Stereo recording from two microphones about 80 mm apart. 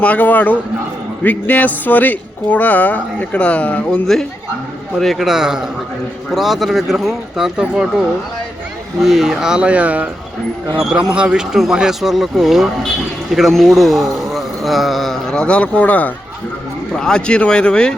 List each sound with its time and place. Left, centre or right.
0.0 s a man's voice: centre
11.1 s a man's voice: centre
16.9 s speech: centre